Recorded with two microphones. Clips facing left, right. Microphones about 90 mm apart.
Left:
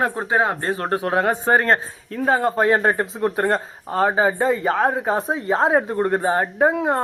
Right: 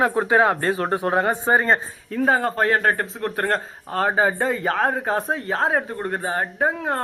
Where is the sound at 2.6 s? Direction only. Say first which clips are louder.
Left 2 dB; 20° left (ahead or behind).